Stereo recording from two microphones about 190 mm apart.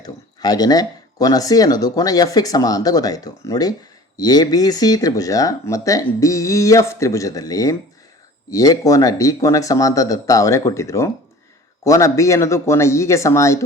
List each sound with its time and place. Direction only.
0.0 s speech: 20° left (ahead or behind)